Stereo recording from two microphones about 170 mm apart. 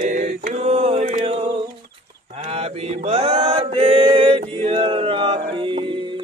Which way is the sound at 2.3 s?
40° right (ahead or behind).